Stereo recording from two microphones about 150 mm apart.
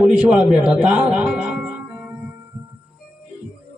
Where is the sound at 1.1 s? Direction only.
5° right (ahead or behind).